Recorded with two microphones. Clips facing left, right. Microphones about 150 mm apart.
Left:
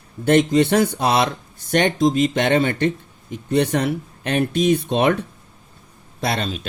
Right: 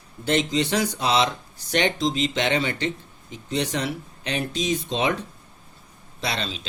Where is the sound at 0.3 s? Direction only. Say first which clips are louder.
Left 8 dB; 55° left (ahead or behind).